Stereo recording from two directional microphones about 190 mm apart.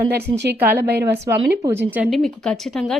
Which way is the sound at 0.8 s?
60° right (ahead or behind).